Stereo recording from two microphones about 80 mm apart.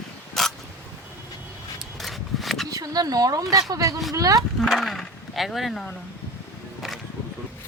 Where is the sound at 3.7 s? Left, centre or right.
Right.